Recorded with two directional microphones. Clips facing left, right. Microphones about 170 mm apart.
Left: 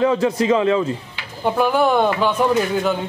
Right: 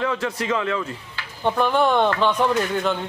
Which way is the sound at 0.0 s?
20° left (ahead or behind).